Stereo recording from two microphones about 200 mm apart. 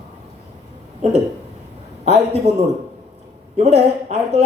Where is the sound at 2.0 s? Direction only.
30° right (ahead or behind).